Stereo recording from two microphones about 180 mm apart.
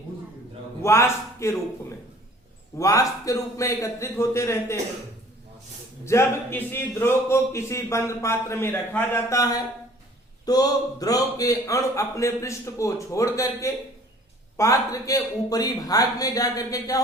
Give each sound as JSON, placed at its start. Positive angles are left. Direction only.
{"t": 0.8, "sound": "a man's voice", "side_deg": 15}
{"t": 2.7, "sound": "a man's voice", "side_deg": 15}
{"t": 6.1, "sound": "a man's voice", "side_deg": 15}